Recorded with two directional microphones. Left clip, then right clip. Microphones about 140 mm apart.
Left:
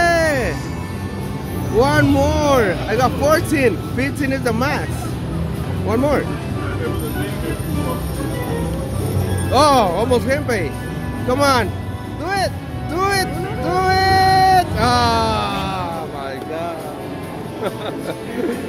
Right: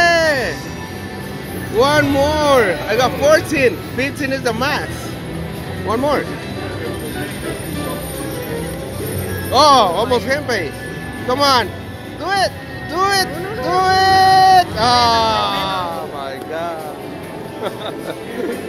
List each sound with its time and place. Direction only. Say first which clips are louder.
0.0 s music: right 2 dB; 35° left (ahead or behind)
1.8 s speech: right 2 dB; 25° left (ahead or behind)
5.9 s speech: right 1 dB; 30° left (ahead or behind)
9.5 s speech: right 3 dB; 35° left (ahead or behind)